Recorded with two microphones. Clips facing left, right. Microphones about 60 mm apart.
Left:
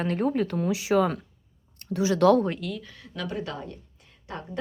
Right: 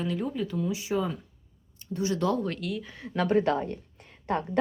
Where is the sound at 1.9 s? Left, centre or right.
Left.